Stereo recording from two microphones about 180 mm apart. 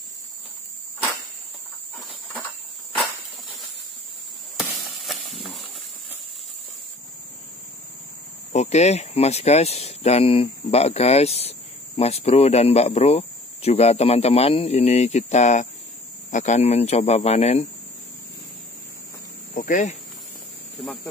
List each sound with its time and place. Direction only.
2.0 s a sound: 5° left (ahead or behind)
8.5 s speech: 40° left (ahead or behind)
19.5 s speech: 45° left (ahead or behind)
20.8 s speech: centre (ahead or behind)